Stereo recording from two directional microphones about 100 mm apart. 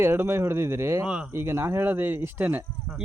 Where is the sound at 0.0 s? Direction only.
25° right (ahead or behind).